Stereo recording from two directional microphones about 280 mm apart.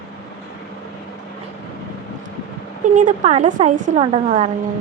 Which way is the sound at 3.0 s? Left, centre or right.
Right.